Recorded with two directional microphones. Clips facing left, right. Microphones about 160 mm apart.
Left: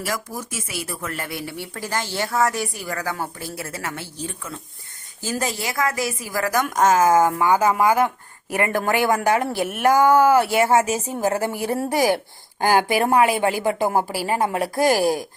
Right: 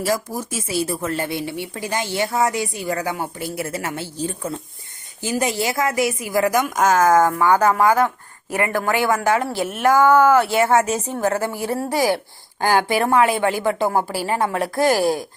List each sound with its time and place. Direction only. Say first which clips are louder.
0.0 s speech: right 6 dB; 30° right (ahead or behind)
5.2 s speech: right 3 dB; 15° right (ahead or behind)
5.5 s speech: right 3 dB; 25° right (ahead or behind)
6.7 s speech: even; centre (ahead or behind)
7.2 s a woman's voice: right 2 dB; 15° left (ahead or behind)